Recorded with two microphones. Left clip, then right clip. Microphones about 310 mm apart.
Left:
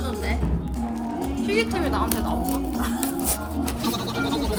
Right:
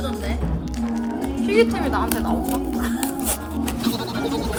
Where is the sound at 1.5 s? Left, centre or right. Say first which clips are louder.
Right 5 dB; right.